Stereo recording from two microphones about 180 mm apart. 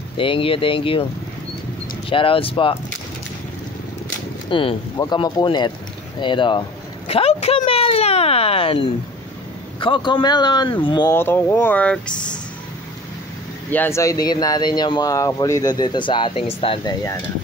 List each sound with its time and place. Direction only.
0.2 s speech: 30° left (ahead or behind)
2.0 s speech: 30° left (ahead or behind)
4.5 s speech: 30° left (ahead or behind)
11.1 s speech: 10° left (ahead or behind)
13.7 s speech: 10° left (ahead or behind); by 16.9 s 30° left (ahead or behind)